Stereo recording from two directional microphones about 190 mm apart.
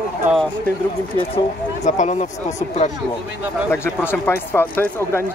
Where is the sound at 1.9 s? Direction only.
40° left (ahead or behind).